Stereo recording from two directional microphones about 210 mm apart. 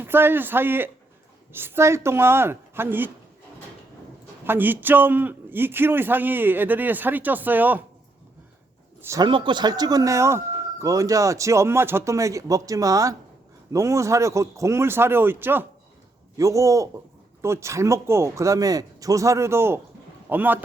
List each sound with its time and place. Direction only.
0.0 s speech: 10° right (ahead or behind)
4.4 s speech: 10° right (ahead or behind)
9.0 s speech: 15° right (ahead or behind)